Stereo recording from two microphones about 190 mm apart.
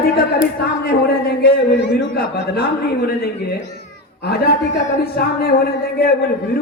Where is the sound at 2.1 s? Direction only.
50° left (ahead or behind).